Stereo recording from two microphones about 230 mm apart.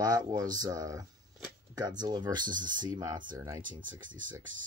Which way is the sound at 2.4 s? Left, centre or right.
Right.